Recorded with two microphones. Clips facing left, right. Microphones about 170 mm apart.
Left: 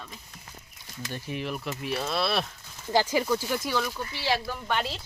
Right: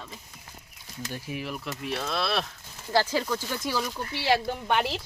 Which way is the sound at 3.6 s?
Centre (ahead or behind).